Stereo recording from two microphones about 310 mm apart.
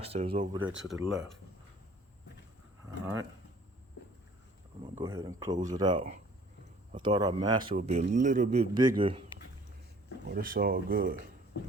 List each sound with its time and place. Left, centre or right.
0.0 s speech: centre
0.7 s speech: centre
4.8 s speech: centre
10.2 s speech: right